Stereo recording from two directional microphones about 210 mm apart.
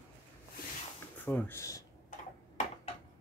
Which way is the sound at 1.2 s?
10° left (ahead or behind).